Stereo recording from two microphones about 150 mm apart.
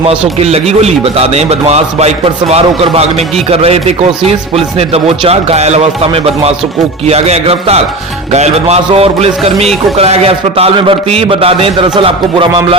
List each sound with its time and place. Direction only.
0.3 s a man's voice: 45° right (ahead or behind)